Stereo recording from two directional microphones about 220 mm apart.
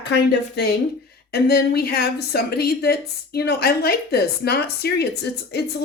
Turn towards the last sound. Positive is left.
turn(degrees=50)  # may be behind; listen again after turning